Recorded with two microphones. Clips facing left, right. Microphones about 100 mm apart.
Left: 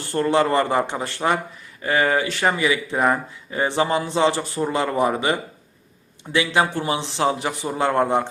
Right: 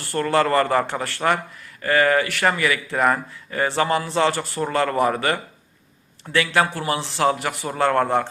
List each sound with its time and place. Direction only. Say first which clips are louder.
0.0 s speech: left 1 dB; 20° left (ahead or behind)